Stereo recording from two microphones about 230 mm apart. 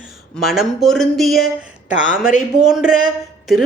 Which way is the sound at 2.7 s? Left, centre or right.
Centre.